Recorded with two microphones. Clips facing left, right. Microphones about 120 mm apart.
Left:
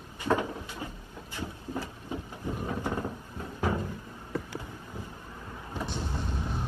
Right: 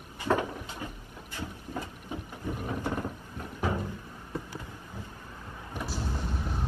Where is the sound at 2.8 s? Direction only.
20° left (ahead or behind).